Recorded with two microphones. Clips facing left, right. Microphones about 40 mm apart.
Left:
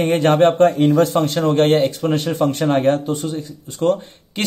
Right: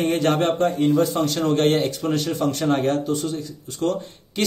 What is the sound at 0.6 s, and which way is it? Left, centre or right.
Speech, left.